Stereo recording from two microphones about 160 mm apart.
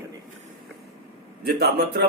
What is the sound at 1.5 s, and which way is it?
Speech, 85° right.